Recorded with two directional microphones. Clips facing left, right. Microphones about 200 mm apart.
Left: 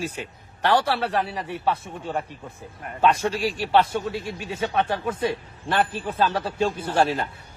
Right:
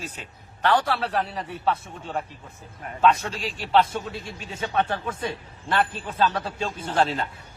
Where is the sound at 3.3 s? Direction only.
10° left (ahead or behind).